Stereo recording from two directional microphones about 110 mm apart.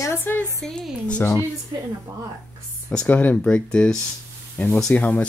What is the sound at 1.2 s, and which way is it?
Speech, 25° left (ahead or behind).